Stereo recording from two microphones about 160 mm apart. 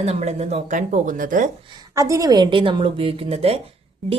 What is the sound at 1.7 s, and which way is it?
A woman's voice, 25° right (ahead or behind).